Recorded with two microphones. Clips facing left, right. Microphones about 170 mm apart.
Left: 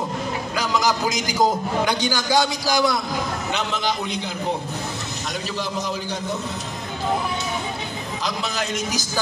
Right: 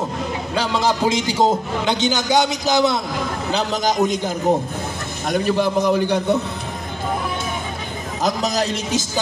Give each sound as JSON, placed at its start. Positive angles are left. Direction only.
{"t": 0.6, "sound": "a man's voice", "side_deg": -30}
{"t": 3.5, "sound": "a man's voice", "side_deg": -40}
{"t": 8.2, "sound": "a man's voice", "side_deg": -45}